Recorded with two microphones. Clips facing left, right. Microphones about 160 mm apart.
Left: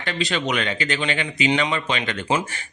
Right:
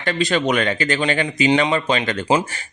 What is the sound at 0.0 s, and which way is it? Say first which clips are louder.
Speech: right 5 dB; 45° right (ahead or behind).